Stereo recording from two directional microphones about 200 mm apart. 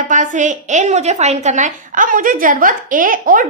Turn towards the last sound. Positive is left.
turn(degrees=-45)  # may be behind; listen again after turning